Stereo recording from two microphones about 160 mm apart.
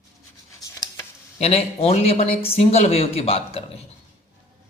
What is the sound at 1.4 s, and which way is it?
Speech, 40° left (ahead or behind).